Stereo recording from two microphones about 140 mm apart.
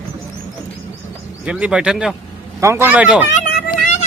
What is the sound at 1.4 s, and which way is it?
Speech, 10° right (ahead or behind).